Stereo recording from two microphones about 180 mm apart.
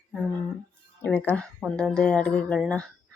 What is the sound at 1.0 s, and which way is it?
A woman's voice, 10° left (ahead or behind).